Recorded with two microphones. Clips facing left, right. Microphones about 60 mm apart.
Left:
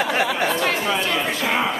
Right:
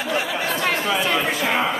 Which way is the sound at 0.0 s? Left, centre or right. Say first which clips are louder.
Left 3 dB; left.